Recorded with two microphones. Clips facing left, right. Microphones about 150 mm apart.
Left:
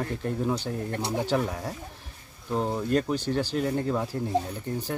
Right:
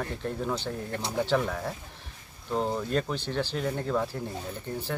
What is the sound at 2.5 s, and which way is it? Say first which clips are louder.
Speech: left 2 dB; 5° left (ahead or behind).